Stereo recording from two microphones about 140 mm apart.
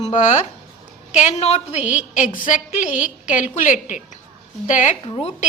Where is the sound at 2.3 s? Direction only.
70° left (ahead or behind).